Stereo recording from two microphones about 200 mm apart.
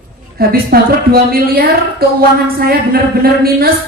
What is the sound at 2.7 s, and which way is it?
Speech, 50° right (ahead or behind).